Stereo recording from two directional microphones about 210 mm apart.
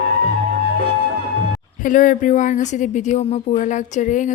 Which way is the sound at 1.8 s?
40° left (ahead or behind).